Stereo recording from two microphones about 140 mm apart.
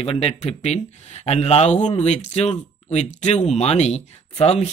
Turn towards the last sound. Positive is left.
turn(degrees=50)  # may be behind; listen again after turning